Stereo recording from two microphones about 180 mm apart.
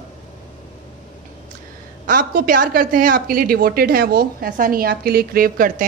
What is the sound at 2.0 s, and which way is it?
A woman's voice, 50° right (ahead or behind).